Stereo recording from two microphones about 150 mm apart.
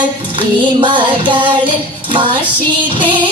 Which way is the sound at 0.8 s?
35° right (ahead or behind).